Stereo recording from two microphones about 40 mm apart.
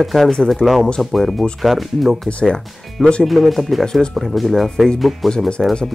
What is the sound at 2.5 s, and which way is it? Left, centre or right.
Speech, left.